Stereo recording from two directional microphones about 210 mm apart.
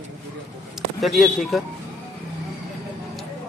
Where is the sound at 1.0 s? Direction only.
Centre (ahead or behind).